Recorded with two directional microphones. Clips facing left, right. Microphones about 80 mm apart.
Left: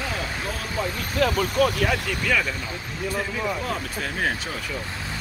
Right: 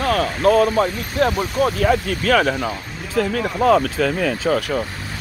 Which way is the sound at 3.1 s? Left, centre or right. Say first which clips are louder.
Right 9 dB; right.